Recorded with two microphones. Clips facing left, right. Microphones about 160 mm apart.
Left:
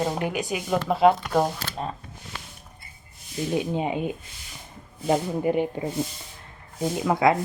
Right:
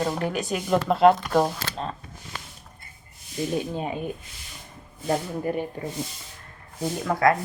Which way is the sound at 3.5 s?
15° left (ahead or behind).